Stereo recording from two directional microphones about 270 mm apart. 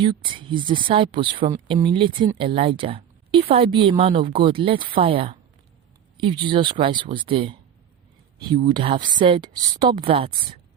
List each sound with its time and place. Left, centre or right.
0.0 s speech: centre
8.5 s speech: centre